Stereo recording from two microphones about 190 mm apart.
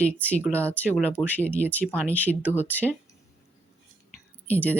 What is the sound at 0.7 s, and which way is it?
Speech, 10° left (ahead or behind).